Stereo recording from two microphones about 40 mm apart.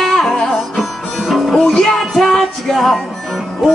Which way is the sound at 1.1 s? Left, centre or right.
Centre.